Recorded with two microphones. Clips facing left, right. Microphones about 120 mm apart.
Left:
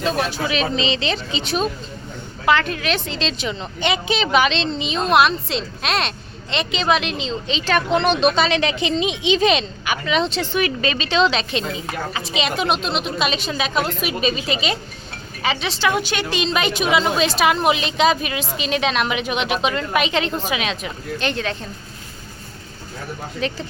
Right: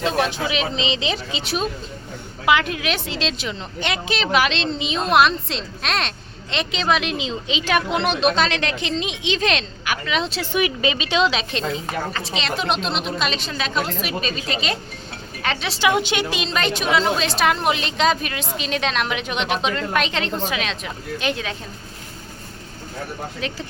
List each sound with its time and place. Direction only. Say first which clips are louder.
0.0 s speech: even; 20° right (ahead or behind); by 11.6 s 5° right (ahead or behind)
12.3 s a woman's voice: left 4 dB; 15° left (ahead or behind)
15.8 s a woman's voice: right 2 dB; 20° right (ahead or behind)
16.3 s speech: left 2 dB; centre (ahead or behind)
21.2 s speech: left 2 dB; 5° right (ahead or behind)
23.4 s speech: left 6 dB; centre (ahead or behind)